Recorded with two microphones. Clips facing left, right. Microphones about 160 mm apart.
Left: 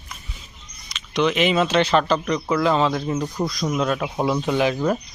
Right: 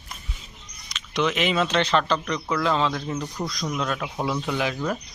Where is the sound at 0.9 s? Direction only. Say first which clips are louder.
Left 4 dB; centre (ahead or behind).